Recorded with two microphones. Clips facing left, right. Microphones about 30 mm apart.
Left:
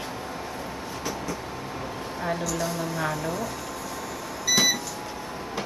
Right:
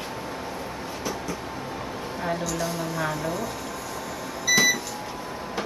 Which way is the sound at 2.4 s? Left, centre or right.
Centre.